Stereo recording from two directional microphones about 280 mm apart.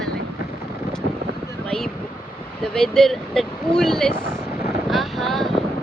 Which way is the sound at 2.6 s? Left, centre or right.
Centre.